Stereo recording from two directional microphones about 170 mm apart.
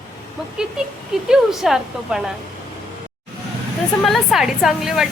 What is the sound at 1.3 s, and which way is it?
Speech, centre (ahead or behind).